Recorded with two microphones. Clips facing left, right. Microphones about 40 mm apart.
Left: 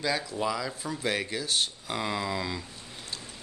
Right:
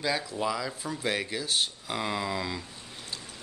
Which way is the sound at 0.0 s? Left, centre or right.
Centre.